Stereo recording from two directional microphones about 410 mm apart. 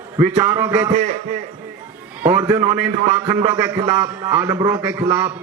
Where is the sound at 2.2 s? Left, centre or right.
Centre.